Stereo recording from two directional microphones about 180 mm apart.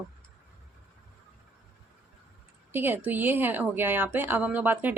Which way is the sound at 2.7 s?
10° right (ahead or behind).